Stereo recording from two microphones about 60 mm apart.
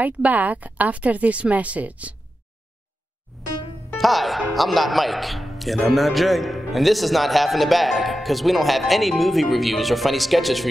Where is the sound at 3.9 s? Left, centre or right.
Centre.